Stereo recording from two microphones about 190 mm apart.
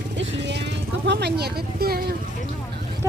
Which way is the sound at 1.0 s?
65° right (ahead or behind).